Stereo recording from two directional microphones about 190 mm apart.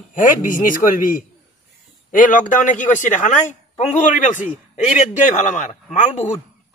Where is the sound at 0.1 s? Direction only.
45° left (ahead or behind).